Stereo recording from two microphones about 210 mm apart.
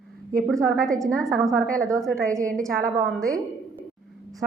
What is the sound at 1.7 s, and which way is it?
Speech, 15° right (ahead or behind).